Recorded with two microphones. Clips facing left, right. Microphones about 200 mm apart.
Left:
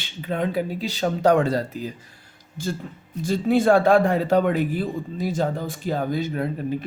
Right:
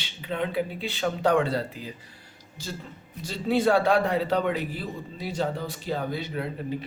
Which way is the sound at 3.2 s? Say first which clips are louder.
Left 5 dB; 50° left (ahead or behind).